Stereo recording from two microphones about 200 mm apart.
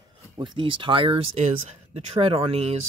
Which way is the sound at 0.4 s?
25° right (ahead or behind).